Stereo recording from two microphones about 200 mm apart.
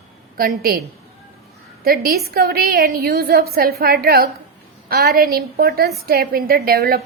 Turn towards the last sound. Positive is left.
turn(degrees=-50)  # may be behind; listen again after turning